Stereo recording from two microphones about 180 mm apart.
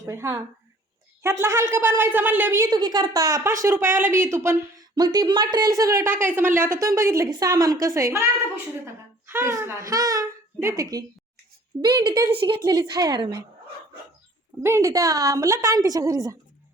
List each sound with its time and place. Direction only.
0.0 s a woman's voice: 15° right (ahead or behind)
9.2 s a woman's voice: 15° right (ahead or behind)
14.6 s a woman's voice: 15° right (ahead or behind)